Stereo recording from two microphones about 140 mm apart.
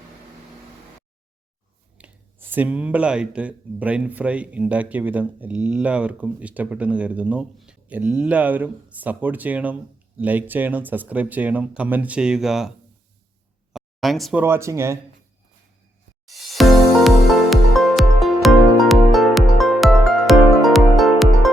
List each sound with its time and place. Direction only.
2.0 s speech: 15° right (ahead or behind)
13.7 s a sound: centre (ahead or behind)
14.3 s speech: 15° right (ahead or behind)
16.2 s music: centre (ahead or behind)